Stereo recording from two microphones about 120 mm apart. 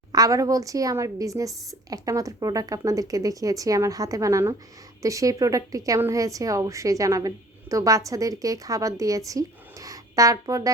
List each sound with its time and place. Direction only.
0.1 s a woman's voice: 30° right (ahead or behind)